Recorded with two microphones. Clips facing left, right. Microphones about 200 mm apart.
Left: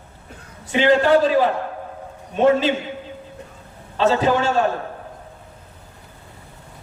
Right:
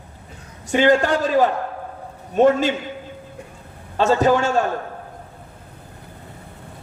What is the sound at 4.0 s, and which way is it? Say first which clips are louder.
Speech: right 1 dB; 45° right (ahead or behind).